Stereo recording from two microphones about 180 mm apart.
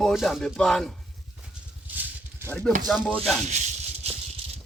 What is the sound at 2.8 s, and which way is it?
Speech, centre (ahead or behind).